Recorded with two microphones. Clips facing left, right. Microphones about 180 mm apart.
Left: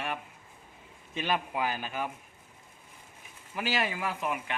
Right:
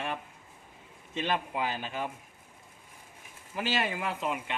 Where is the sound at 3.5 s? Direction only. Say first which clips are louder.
Even; 25° right (ahead or behind).